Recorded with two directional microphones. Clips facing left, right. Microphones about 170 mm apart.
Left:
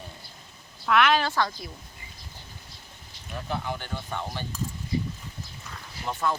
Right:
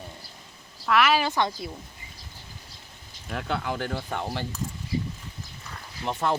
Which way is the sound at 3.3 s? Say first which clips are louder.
Right 3 dB; 70° right (ahead or behind).